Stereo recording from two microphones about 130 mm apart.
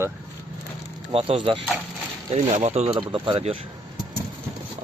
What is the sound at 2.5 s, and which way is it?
Speech, 60° right (ahead or behind).